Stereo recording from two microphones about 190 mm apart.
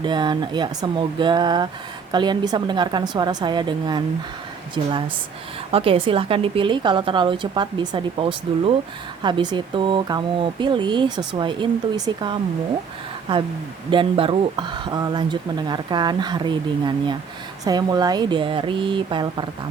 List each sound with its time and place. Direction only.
0.0 s speech: 25° right (ahead or behind)
13.9 s speech: 25° right (ahead or behind)